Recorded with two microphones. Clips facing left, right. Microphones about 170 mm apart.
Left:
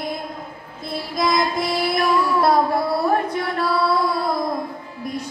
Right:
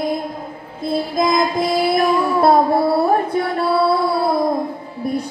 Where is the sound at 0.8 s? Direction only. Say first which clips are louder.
Right 5 dB; 30° right (ahead or behind).